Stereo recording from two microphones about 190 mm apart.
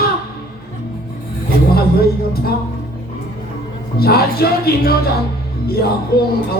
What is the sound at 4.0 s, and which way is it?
Speech, 55° left (ahead or behind).